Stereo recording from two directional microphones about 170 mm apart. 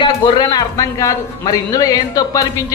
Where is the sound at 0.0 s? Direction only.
25° left (ahead or behind).